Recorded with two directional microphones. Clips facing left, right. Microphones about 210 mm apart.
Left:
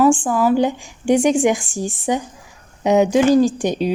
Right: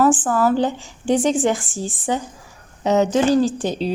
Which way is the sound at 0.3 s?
10° left (ahead or behind).